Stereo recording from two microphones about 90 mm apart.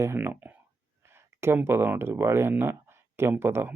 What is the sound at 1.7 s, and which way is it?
Speech, 25° right (ahead or behind).